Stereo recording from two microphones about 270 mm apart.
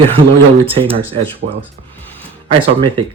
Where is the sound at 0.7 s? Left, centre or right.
Centre.